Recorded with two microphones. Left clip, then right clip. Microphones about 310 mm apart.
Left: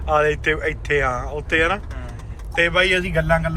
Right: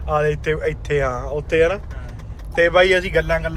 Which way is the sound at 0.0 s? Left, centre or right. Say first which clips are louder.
Left 2 dB; centre.